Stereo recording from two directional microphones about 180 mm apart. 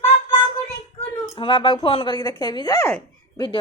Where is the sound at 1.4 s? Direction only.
25° left (ahead or behind).